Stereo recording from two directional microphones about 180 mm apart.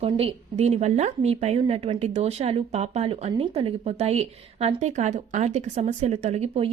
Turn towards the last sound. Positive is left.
turn(degrees=-35)  # may be behind; listen again after turning